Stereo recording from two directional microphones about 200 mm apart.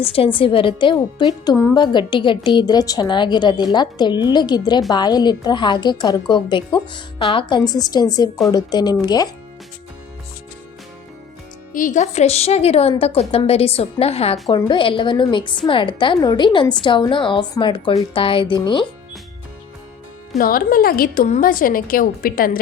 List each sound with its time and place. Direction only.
0.0 s speech: 30° left (ahead or behind)
11.7 s a woman's voice: 40° left (ahead or behind); by 18.9 s 25° left (ahead or behind)
20.4 s a woman's voice: 45° left (ahead or behind)